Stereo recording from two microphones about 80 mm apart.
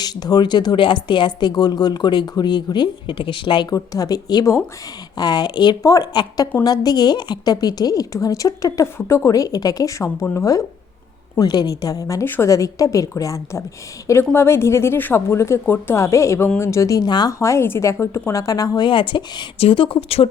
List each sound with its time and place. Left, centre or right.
0.0 s speech: left
3.7 s a woman's voice: left
5.8 s a woman's voice: left
6.1 s a woman's voice: left
11.3 s a woman's voice: left
12.2 s a woman's voice: left
12.5 s a woman's voice: left
17.4 s speech: left
18.8 s speech: left